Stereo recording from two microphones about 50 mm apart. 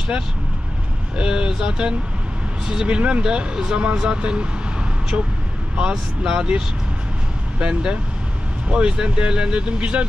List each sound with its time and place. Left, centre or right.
1.1 s speech: centre